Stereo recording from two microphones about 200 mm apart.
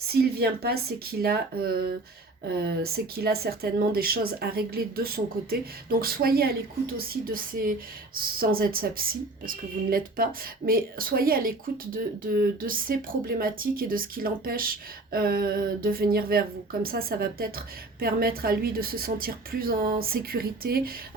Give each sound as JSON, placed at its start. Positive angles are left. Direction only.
{"t": 0.1, "sound": "speech", "side_deg": -50}
{"t": 2.9, "sound": "speech", "side_deg": -50}